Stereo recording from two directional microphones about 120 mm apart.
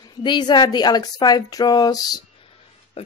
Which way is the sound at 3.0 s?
55° left (ahead or behind).